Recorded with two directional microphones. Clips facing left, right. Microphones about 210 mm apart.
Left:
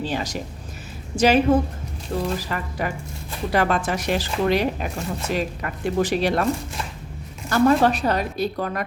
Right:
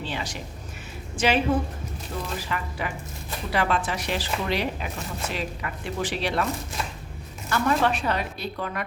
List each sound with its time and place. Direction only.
0.0 s a woman's voice: 40° left (ahead or behind)
7.5 s a woman's voice: 40° left (ahead or behind)